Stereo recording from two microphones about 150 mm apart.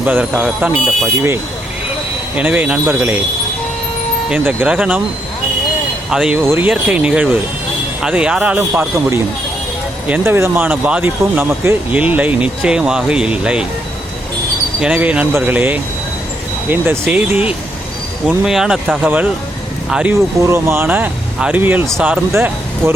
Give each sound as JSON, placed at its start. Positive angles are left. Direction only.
{"t": 0.0, "sound": "speech", "side_deg": -10}
{"t": 2.3, "sound": "speech", "side_deg": -10}
{"t": 4.3, "sound": "speech", "side_deg": -10}
{"t": 6.1, "sound": "speech", "side_deg": -5}
{"t": 6.4, "sound": "speech", "side_deg": -15}
{"t": 14.8, "sound": "speech", "side_deg": -10}
{"t": 20.1, "sound": "speech", "side_deg": -20}